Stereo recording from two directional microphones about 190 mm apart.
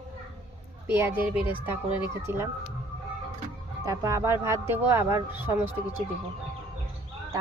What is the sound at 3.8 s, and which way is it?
Speech, 15° right (ahead or behind).